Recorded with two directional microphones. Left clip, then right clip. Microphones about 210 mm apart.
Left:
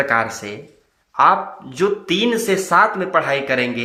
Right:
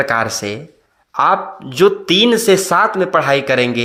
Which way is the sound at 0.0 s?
40° right (ahead or behind).